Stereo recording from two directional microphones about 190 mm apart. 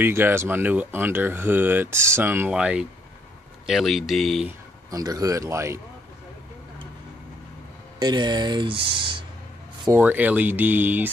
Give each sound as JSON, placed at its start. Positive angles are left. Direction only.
{"t": 0.0, "sound": "speech", "side_deg": -10}
{"t": 4.9, "sound": "speech", "side_deg": -20}
{"t": 8.0, "sound": "speech", "side_deg": -20}
{"t": 9.8, "sound": "speech", "side_deg": -10}